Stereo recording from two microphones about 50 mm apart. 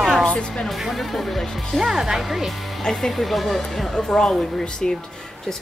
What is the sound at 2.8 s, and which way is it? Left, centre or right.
Speech, centre.